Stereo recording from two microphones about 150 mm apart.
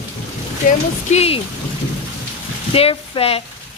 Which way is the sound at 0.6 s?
60° left (ahead or behind).